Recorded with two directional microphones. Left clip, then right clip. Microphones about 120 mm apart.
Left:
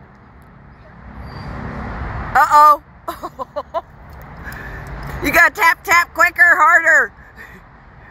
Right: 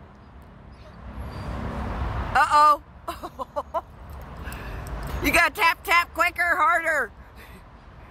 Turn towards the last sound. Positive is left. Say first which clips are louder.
# left 12 dB
turn(degrees=0)  # may be behind; listen again after turning